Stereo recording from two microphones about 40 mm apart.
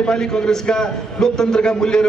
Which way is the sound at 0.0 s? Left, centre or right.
Centre.